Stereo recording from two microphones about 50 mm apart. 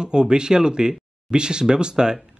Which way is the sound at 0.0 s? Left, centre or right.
Centre.